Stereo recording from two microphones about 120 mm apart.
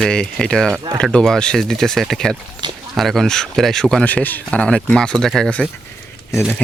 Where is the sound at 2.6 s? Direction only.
40° right (ahead or behind).